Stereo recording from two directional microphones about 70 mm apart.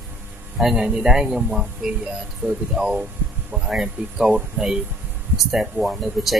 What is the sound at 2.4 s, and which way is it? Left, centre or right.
Speech, right.